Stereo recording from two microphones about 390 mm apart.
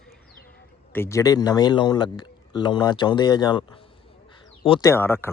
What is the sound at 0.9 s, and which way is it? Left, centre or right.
A man's voice, centre.